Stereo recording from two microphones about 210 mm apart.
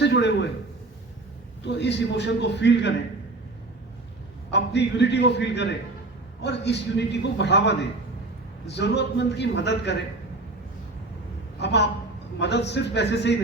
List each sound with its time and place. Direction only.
0.0 s a man's voice: 55° left (ahead or behind)
1.6 s a man's voice: 55° left (ahead or behind)
4.5 s a man's voice: 55° left (ahead or behind)
11.6 s a woman's voice: 55° left (ahead or behind)